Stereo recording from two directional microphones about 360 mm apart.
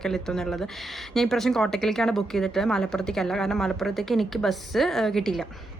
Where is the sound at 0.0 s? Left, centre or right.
Centre.